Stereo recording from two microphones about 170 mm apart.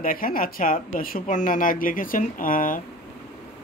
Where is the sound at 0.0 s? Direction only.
55° left (ahead or behind).